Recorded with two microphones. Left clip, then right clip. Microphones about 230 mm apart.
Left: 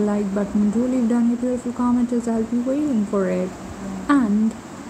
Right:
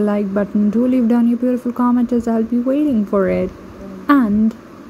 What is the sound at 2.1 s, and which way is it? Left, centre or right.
A woman's voice, right.